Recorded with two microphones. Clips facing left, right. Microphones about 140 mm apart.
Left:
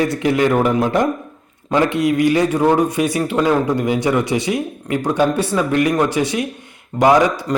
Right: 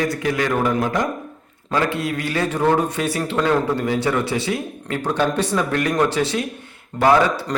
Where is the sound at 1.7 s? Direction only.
20° left (ahead or behind).